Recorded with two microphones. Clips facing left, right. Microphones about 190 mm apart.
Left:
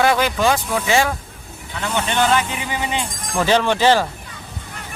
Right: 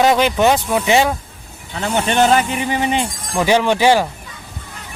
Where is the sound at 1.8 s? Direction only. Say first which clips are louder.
Right 4 dB; 45° right (ahead or behind).